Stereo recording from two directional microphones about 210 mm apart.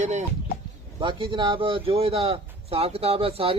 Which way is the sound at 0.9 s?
20° right (ahead or behind).